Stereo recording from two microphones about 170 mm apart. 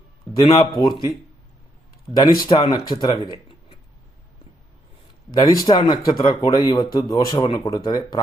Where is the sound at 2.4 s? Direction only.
25° left (ahead or behind).